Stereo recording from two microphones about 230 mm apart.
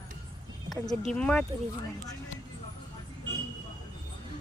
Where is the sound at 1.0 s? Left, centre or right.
Centre.